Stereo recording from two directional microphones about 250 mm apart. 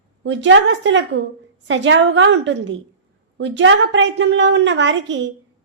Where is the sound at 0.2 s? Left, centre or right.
Right.